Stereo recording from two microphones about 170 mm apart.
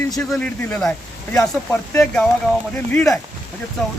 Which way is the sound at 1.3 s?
15° left (ahead or behind).